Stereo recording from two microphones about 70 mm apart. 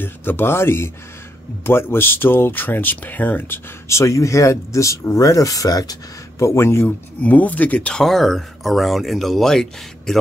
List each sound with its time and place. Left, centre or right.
0.0 s speech: left
3.9 s speech: left
7.2 s speech: left
7.9 s speech: centre